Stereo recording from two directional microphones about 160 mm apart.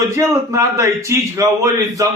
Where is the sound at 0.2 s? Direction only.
20° right (ahead or behind).